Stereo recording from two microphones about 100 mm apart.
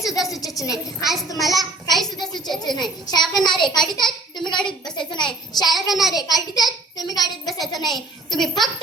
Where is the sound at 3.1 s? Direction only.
45° left (ahead or behind).